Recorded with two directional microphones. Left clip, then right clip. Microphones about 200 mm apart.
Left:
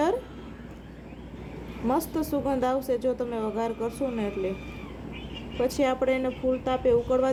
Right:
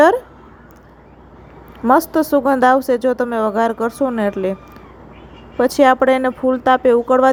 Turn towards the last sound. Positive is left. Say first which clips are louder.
# right 10 dB
turn(degrees=-40)  # may be behind; listen again after turning